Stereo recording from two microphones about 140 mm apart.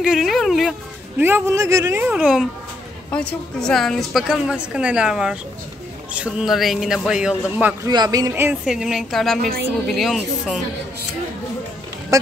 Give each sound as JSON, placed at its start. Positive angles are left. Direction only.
{"t": 0.0, "sound": "speech", "side_deg": 0}
{"t": 1.2, "sound": "speech", "side_deg": -15}
{"t": 3.1, "sound": "a woman's voice", "side_deg": 10}
{"t": 7.8, "sound": "speech", "side_deg": -30}
{"t": 8.3, "sound": "speech", "side_deg": -15}
{"t": 8.6, "sound": "a woman's voice", "side_deg": 0}
{"t": 12.1, "sound": "speech", "side_deg": -25}